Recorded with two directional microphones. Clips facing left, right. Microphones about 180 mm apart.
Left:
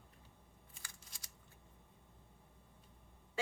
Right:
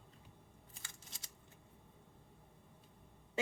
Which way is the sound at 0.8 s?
25° right (ahead or behind).